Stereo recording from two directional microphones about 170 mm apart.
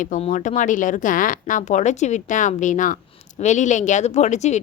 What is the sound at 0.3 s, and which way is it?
A woman's voice, 50° left (ahead or behind).